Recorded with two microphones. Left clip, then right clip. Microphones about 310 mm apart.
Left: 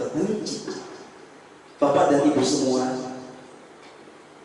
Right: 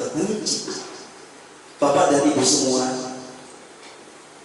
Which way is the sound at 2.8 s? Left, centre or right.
Centre.